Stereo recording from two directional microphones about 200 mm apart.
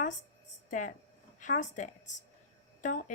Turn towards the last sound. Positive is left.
turn(degrees=40)  # may be behind; listen again after turning